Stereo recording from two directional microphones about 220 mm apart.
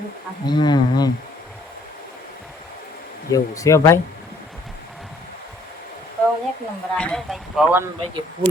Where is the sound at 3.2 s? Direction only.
15° left (ahead or behind).